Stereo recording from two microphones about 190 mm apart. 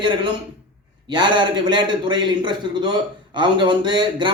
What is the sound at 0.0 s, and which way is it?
A man's voice, 25° right (ahead or behind).